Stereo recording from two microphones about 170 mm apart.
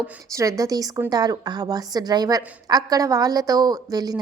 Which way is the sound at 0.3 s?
20° right (ahead or behind).